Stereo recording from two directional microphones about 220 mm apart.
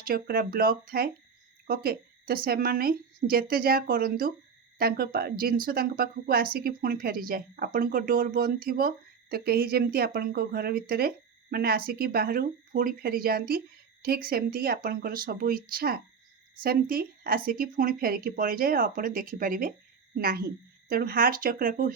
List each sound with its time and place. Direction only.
0.0 s a woman's voice: 40° right (ahead or behind)